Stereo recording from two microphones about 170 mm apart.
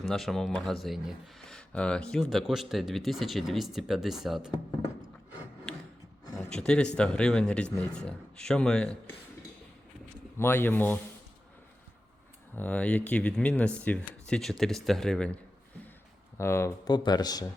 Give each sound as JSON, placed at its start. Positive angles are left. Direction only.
{"t": 0.0, "sound": "speech", "side_deg": 0}
{"t": 6.5, "sound": "speech", "side_deg": 5}
{"t": 10.3, "sound": "speech", "side_deg": 15}
{"t": 12.5, "sound": "speech", "side_deg": 10}
{"t": 16.4, "sound": "speech", "side_deg": 15}